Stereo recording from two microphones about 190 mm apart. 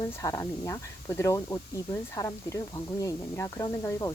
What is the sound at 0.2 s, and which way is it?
Speech, 15° left (ahead or behind).